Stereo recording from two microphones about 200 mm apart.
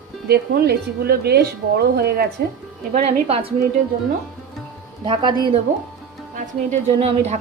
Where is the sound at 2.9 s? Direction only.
30° right (ahead or behind).